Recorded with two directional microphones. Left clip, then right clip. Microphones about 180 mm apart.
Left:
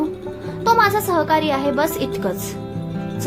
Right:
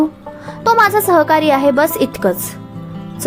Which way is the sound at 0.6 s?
35° right (ahead or behind).